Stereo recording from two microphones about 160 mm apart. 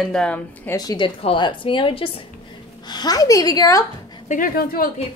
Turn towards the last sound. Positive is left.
turn(degrees=65)  # may be behind; listen again after turning